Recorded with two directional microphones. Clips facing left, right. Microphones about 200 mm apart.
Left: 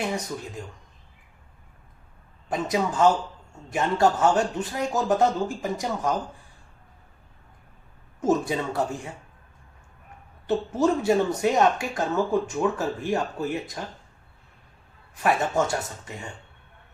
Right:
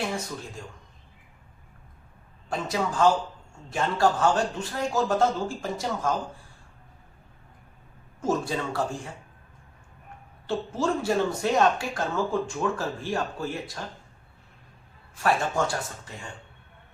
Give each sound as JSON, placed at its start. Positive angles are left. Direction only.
{"t": 2.5, "sound": "speech", "side_deg": 20}
{"t": 8.2, "sound": "speech", "side_deg": 20}
{"t": 10.4, "sound": "speech", "side_deg": 20}
{"t": 15.1, "sound": "speech", "side_deg": 20}